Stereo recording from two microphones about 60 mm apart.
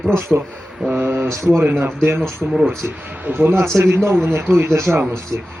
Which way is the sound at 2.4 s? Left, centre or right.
Centre.